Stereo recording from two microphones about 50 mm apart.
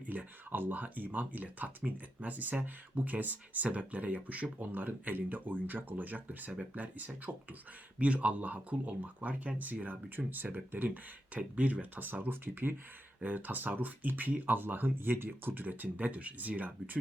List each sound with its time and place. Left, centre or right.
0.1 s speech: right
10.8 s speech: right
13.2 s speech: right